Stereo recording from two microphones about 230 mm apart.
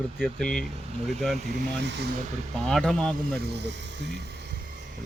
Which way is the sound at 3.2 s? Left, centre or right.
Right.